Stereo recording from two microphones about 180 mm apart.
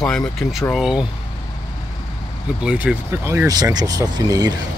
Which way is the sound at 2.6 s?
10° right (ahead or behind).